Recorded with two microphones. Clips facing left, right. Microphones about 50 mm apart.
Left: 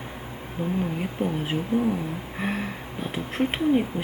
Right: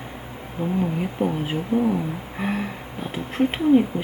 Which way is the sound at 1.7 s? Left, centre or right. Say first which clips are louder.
Right 3 dB; centre.